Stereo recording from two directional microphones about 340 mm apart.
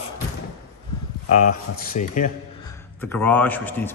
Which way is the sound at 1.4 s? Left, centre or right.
Left.